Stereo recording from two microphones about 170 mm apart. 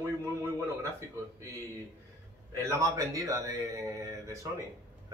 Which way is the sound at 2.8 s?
20° right (ahead or behind).